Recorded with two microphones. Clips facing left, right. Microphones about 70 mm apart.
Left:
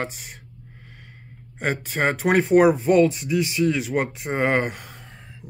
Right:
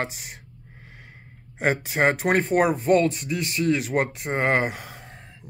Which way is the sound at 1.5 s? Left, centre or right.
Centre.